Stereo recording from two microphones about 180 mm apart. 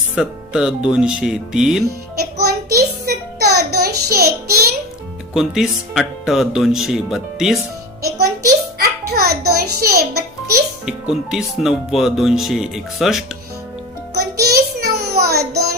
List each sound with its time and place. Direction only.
0.2 s speech: 5° right (ahead or behind)
2.4 s child singing: 60° right (ahead or behind)
5.3 s speech: centre (ahead or behind)
8.8 s music: 60° right (ahead or behind)
10.8 s speech: 5° right (ahead or behind)
14.1 s music: 60° right (ahead or behind)